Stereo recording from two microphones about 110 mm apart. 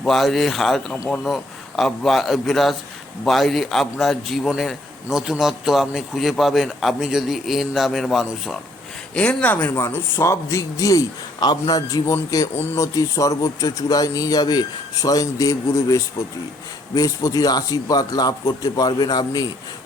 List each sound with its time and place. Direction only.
0.0 s a man's voice: centre (ahead or behind)
9.1 s speech: 10° left (ahead or behind); by 19.5 s 35° left (ahead or behind)